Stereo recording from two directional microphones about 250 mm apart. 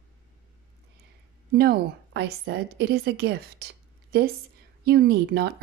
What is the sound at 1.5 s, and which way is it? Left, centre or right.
A woman's voice, right.